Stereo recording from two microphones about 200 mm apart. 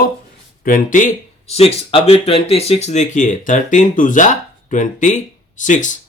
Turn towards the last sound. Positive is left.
turn(degrees=40)  # may be behind; listen again after turning